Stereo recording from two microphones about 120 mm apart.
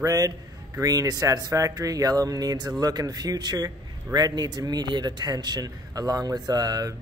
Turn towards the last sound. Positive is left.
turn(degrees=-30)  # may be behind; listen again after turning